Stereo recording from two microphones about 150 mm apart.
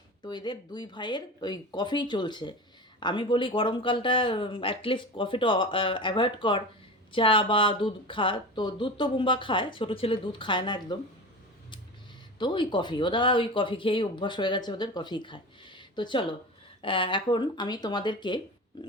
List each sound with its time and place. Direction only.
0.2 s speech: 30° left (ahead or behind)
12.4 s speech: 30° left (ahead or behind)